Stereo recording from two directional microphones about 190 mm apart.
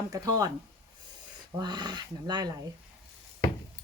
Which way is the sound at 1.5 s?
20° right (ahead or behind).